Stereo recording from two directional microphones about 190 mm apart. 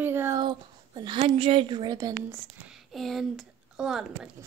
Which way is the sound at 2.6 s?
Centre (ahead or behind).